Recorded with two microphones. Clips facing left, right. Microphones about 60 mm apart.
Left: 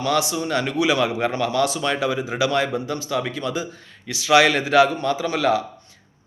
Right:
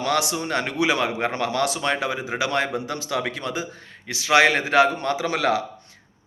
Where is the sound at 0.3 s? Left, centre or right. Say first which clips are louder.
Left 2 dB; right.